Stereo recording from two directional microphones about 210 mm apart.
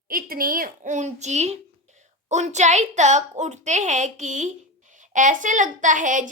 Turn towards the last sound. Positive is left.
turn(degrees=-40)  # may be behind; listen again after turning